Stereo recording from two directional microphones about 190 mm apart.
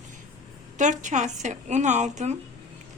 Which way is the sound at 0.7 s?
40° right (ahead or behind).